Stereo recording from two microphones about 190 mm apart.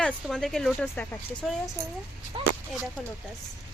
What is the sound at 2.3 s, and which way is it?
Speech, 25° right (ahead or behind).